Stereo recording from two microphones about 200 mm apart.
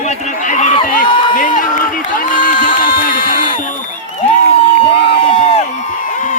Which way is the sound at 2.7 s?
45° left (ahead or behind).